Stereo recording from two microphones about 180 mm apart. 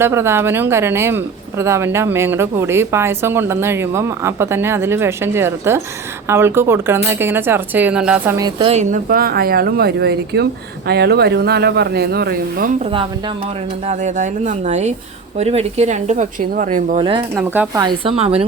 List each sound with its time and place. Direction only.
0.0 s speech: 15° right (ahead or behind)
8.4 s speech: 25° right (ahead or behind)
8.8 s speech: 50° right (ahead or behind)
12.8 s speech: 30° right (ahead or behind)
13.8 s speech: 40° right (ahead or behind)
17.3 s speech: 10° right (ahead or behind)
17.8 s speech: 30° right (ahead or behind)